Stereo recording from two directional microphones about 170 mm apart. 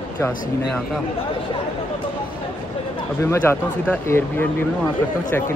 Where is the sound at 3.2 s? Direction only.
15° left (ahead or behind).